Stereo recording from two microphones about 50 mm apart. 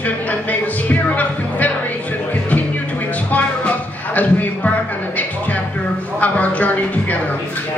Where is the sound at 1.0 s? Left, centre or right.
Left.